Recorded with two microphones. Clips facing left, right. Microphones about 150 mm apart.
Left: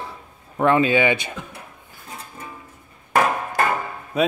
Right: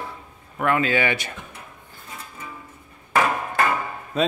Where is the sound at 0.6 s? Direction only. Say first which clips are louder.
Left 4 dB; 25° left (ahead or behind).